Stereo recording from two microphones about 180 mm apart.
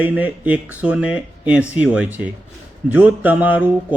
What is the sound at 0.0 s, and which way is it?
Speech, 10° right (ahead or behind).